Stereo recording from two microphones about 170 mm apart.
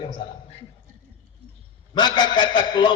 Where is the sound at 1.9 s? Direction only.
25° left (ahead or behind).